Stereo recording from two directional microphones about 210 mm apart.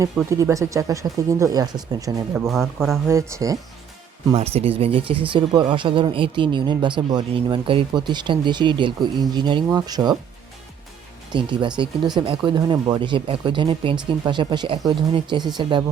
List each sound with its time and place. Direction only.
0.3 s speech: 15° right (ahead or behind)
4.3 s speech: 30° right (ahead or behind)
11.3 s speech: 20° right (ahead or behind)